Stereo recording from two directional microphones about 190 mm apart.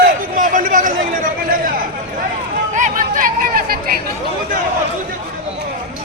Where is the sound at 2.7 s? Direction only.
45° right (ahead or behind).